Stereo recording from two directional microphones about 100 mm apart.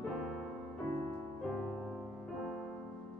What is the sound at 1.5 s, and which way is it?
Music, 10° left (ahead or behind).